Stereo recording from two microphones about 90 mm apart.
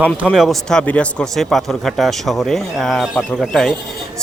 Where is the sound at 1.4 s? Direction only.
Centre (ahead or behind).